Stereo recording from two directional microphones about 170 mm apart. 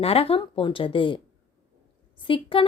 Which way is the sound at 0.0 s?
35° left (ahead or behind).